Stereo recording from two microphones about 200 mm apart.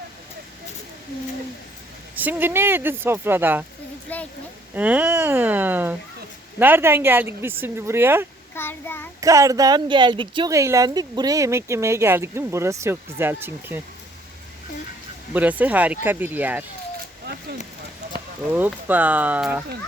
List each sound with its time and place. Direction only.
2.1 s speech: 10° right (ahead or behind)
4.1 s a sound: 10° left (ahead or behind)
4.7 s speech: 10° right (ahead or behind)
8.5 s child singing: 10° left (ahead or behind)
9.2 s speech: 15° right (ahead or behind)
15.3 s speech: 10° right (ahead or behind)
18.4 s speech: 10° right (ahead or behind)